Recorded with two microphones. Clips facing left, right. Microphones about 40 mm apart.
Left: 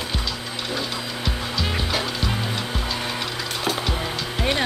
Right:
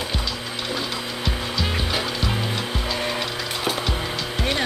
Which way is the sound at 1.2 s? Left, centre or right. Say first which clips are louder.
Right 1 dB; centre.